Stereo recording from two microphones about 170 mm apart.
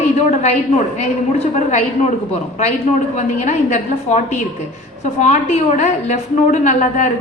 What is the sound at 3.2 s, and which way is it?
A woman's voice, 45° left (ahead or behind).